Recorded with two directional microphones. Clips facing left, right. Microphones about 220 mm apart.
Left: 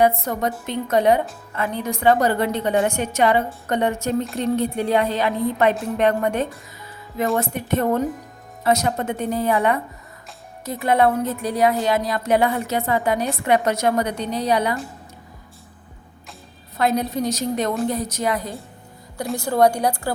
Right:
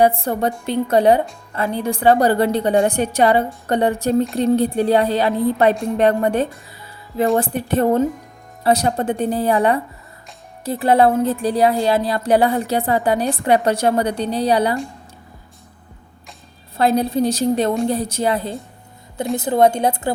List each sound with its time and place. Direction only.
0.0 s speech: 30° right (ahead or behind)
16.7 s a woman's voice: 30° right (ahead or behind)